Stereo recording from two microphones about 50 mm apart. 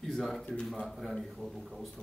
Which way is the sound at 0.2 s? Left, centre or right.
Centre.